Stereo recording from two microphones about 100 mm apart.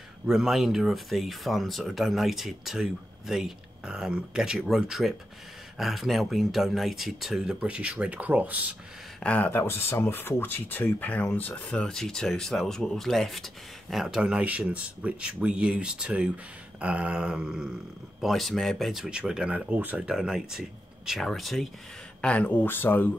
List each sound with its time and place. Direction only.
0.3 s speech: 5° right (ahead or behind)
9.2 s speech: 15° left (ahead or behind)
22.2 s speech: 15° left (ahead or behind)